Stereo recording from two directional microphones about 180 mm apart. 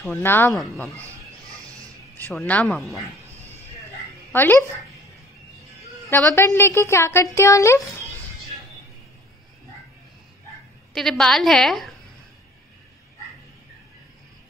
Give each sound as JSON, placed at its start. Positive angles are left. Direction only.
{"t": 0.0, "sound": "a woman's voice", "side_deg": 10}
{"t": 2.1, "sound": "a woman's voice", "side_deg": 10}
{"t": 4.3, "sound": "speech", "side_deg": 10}
{"t": 6.0, "sound": "a woman's voice", "side_deg": 10}
{"t": 11.0, "sound": "a woman's voice", "side_deg": 0}